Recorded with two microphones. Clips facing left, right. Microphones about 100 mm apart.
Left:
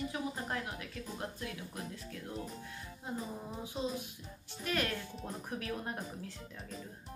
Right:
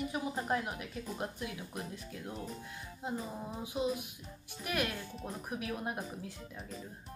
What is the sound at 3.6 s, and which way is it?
Speech, 15° right (ahead or behind).